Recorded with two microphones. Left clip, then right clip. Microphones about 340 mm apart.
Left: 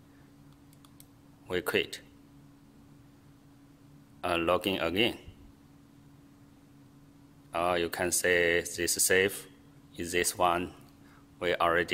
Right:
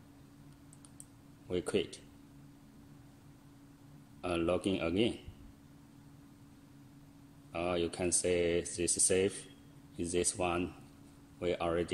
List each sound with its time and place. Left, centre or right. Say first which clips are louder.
1.5 s speech: left 5 dB; left
4.2 s speech: left 5 dB; left
7.5 s speech: left 6 dB; centre